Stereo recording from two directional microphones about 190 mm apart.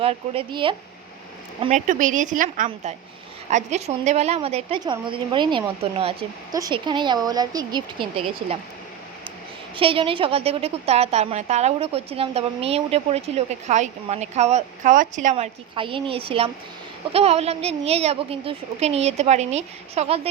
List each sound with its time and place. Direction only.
0.0 s speech: 30° right (ahead or behind)
1.6 s a woman's voice: 40° right (ahead or behind)
6.5 s speech: 20° right (ahead or behind)
9.7 s a woman's voice: 30° right (ahead or behind)
15.7 s a woman's voice: 25° right (ahead or behind)